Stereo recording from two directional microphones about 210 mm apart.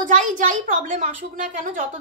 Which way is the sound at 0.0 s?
35° right (ahead or behind).